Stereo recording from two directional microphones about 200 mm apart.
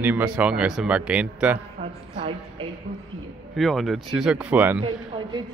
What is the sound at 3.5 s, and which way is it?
Speech, centre (ahead or behind).